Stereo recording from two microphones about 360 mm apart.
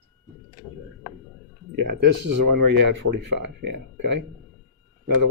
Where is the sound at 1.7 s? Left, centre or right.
Right.